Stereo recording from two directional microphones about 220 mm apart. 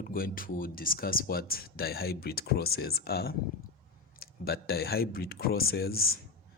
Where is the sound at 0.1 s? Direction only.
40° left (ahead or behind).